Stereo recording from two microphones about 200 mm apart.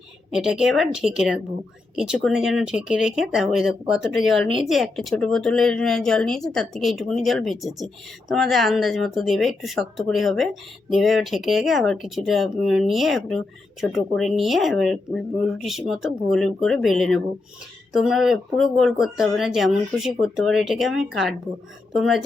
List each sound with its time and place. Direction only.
0.3 s speech: 5° right (ahead or behind)